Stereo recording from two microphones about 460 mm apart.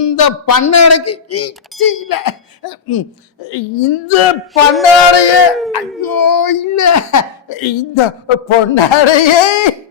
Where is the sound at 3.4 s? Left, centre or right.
Left.